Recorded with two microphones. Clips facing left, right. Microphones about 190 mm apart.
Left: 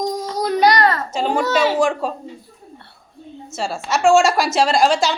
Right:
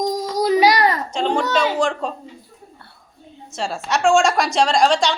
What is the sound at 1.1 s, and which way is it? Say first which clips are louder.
A woman's voice: left 1 dB; 5° left (ahead or behind).